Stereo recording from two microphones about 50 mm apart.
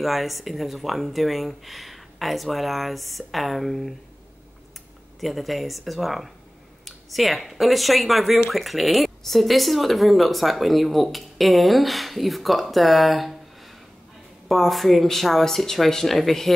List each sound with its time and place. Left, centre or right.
0.0 s speech: centre
5.2 s speech: centre
14.5 s speech: centre